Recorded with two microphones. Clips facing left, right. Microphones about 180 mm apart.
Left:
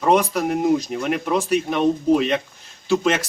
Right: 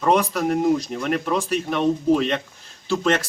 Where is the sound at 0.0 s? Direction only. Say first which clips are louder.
Left 1 dB; centre (ahead or behind).